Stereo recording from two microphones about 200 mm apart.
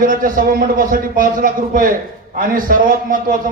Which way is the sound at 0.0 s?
45° right (ahead or behind).